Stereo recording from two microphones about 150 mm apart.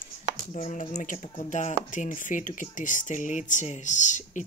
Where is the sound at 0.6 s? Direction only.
50° left (ahead or behind).